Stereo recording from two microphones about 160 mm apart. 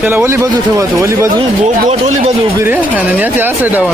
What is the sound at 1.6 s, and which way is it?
Speech, 45° right (ahead or behind).